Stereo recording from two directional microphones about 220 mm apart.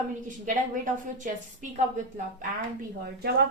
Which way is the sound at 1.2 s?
35° right (ahead or behind).